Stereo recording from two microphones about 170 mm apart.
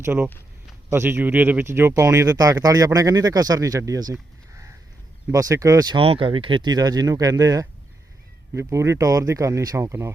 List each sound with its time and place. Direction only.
0.0 s speech: 15° right (ahead or behind)
5.3 s speech: 20° right (ahead or behind)